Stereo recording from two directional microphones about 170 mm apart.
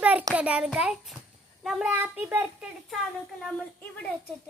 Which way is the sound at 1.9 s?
10° right (ahead or behind).